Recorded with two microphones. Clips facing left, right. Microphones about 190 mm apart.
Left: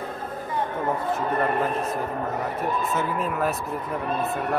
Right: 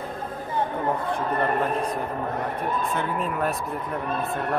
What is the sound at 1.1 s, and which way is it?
Speech, 5° left (ahead or behind).